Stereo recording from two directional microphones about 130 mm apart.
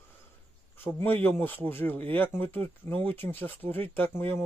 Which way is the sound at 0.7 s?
15° left (ahead or behind).